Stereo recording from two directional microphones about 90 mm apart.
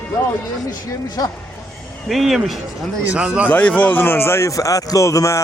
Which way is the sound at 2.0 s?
Centre (ahead or behind).